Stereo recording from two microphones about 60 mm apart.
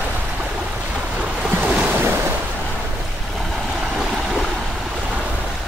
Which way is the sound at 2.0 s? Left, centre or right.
Right.